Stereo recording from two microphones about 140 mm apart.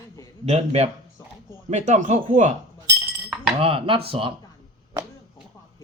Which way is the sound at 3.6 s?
40° right (ahead or behind).